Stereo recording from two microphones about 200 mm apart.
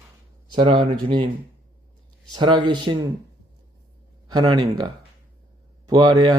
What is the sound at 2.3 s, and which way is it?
Speech, 20° right (ahead or behind).